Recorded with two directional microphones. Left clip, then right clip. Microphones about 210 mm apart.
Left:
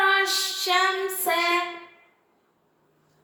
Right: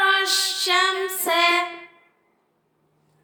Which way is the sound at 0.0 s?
45° right (ahead or behind).